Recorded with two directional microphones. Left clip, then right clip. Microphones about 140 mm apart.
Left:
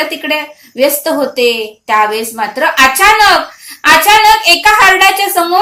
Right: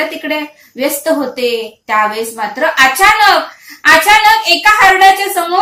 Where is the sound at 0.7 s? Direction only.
40° left (ahead or behind).